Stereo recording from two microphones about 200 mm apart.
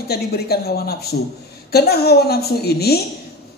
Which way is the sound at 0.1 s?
50° left (ahead or behind).